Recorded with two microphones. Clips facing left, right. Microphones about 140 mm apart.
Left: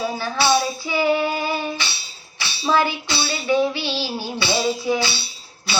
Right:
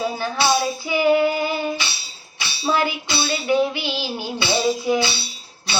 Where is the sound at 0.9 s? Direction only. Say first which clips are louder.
Right 3 dB; 15° right (ahead or behind).